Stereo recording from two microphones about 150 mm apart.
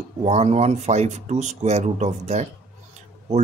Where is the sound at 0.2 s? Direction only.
45° right (ahead or behind).